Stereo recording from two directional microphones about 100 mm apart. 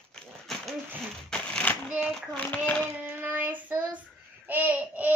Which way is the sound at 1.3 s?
10° left (ahead or behind).